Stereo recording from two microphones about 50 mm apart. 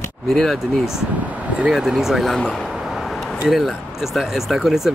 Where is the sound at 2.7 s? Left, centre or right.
Centre.